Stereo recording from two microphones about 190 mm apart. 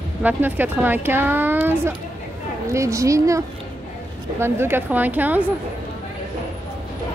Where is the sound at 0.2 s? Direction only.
10° right (ahead or behind).